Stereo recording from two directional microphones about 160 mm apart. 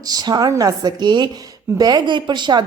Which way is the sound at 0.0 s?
25° right (ahead or behind).